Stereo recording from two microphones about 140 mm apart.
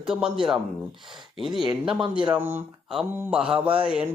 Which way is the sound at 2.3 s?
15° right (ahead or behind).